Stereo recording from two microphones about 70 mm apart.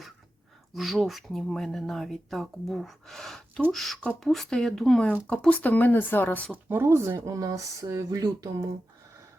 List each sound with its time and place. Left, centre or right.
0.7 s speech: centre
5.6 s speech: left
6.5 s speech: right
7.3 s speech: right